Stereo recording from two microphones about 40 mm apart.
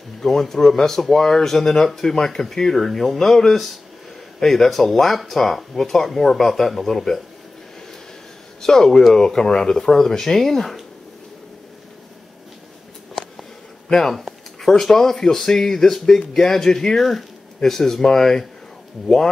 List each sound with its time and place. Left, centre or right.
0.2 s speech: centre
8.5 s speech: centre
13.8 s speech: centre